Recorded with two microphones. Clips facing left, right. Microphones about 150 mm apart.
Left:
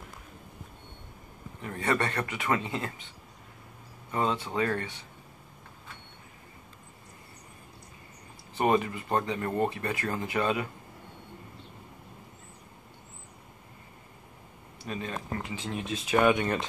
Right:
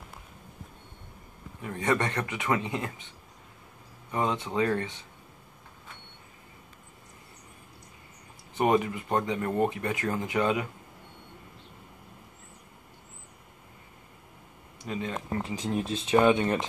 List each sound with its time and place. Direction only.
1.6 s speech: 15° right (ahead or behind)
4.1 s speech: 15° right (ahead or behind)
8.5 s speech: 15° right (ahead or behind)
14.8 s speech: 20° right (ahead or behind)
15.5 s speech: 40° right (ahead or behind); by 16.6 s 25° right (ahead or behind)